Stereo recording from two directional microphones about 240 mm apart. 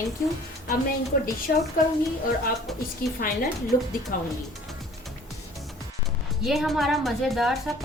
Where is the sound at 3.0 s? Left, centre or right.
Left.